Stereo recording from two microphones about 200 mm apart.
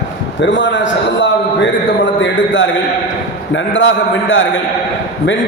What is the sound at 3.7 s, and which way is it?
Speech, 70° left (ahead or behind).